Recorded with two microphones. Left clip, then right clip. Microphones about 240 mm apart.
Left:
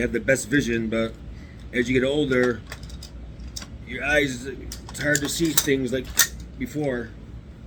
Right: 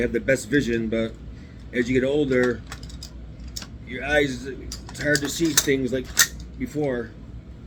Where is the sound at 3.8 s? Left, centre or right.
Left.